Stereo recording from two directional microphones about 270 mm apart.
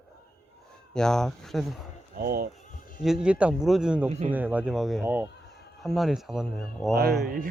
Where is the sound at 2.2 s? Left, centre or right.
Right.